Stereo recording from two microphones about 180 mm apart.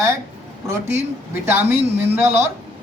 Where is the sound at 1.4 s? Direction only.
10° right (ahead or behind).